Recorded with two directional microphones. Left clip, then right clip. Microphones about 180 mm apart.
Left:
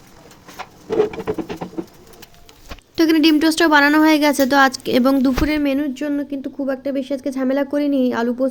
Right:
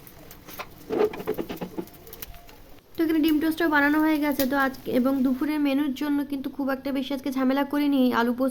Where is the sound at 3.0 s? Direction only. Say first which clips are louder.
Left 9 dB; 25° left (ahead or behind).